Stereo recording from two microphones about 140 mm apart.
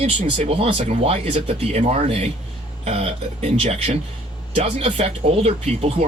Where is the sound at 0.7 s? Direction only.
55° right (ahead or behind).